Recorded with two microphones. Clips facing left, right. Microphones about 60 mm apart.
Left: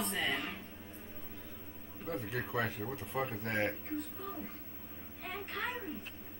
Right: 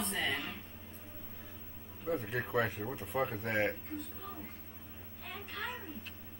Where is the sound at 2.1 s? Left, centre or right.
Centre.